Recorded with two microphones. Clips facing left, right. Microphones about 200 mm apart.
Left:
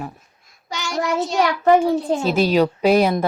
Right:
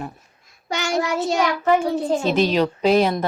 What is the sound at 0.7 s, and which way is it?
Child singing, 55° right (ahead or behind).